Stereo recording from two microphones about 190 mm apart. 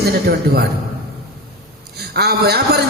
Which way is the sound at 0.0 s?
55° right (ahead or behind).